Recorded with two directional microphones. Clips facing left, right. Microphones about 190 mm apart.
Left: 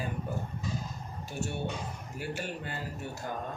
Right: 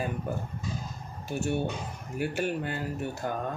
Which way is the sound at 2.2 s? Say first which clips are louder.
Right 8 dB; 55° right (ahead or behind).